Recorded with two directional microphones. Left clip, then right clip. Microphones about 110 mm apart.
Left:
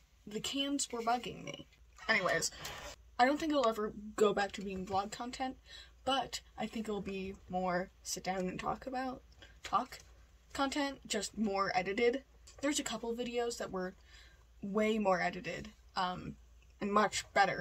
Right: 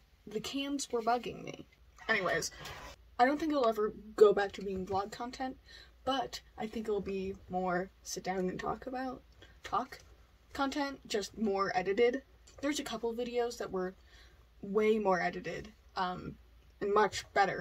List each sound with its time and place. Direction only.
0.3 s a woman's voice: 15° left (ahead or behind)
3.2 s a woman's voice: 15° left (ahead or behind)